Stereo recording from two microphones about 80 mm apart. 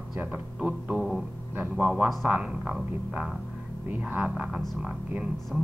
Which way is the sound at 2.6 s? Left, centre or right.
Centre.